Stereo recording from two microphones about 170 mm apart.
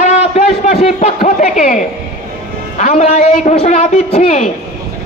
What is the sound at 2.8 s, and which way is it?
A woman's voice, 45° left (ahead or behind).